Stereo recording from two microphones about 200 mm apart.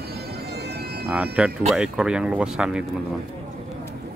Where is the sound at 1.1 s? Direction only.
5° right (ahead or behind).